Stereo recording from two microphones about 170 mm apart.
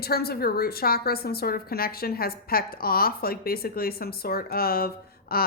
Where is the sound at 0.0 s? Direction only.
65° left (ahead or behind).